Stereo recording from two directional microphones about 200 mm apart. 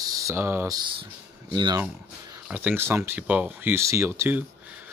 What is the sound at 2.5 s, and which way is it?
Speech, 10° right (ahead or behind).